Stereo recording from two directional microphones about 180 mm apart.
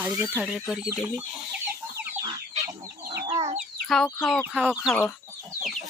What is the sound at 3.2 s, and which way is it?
Chicken, 35° right (ahead or behind).